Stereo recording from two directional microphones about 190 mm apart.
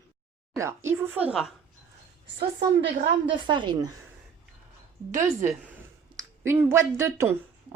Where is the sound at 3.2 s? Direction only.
25° right (ahead or behind).